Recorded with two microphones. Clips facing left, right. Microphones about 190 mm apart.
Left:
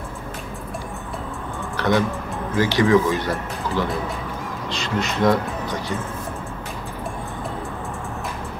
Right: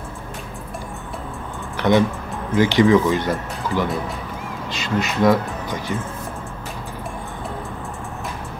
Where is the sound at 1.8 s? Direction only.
20° right (ahead or behind).